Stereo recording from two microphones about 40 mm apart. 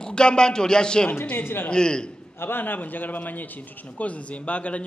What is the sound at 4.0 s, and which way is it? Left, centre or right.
Speech, left.